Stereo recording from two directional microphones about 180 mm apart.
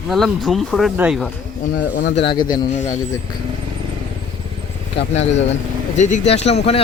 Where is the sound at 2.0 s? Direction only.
70° left (ahead or behind).